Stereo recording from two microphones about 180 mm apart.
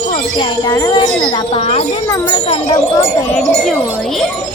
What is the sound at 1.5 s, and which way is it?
Speech, 30° left (ahead or behind).